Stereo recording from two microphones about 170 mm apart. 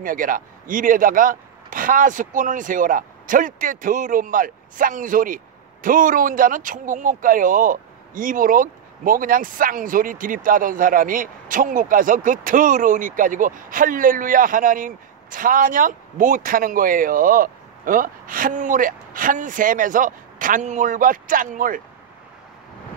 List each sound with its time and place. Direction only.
0.0 s speech: 55° right (ahead or behind)